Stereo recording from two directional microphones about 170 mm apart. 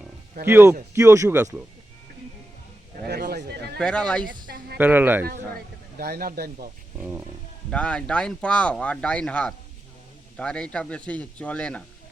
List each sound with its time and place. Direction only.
0.4 s speech: 15° right (ahead or behind)
3.1 s a sound: 70° right (ahead or behind)
3.8 s speech: 5° left (ahead or behind)
4.3 s a sound: 60° right (ahead or behind)
4.8 s speech: 10° right (ahead or behind)
6.0 s speech: 65° right (ahead or behind)
7.7 s speech: 5° left (ahead or behind)